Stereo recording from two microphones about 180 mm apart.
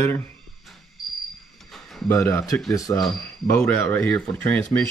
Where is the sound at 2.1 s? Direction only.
15° left (ahead or behind).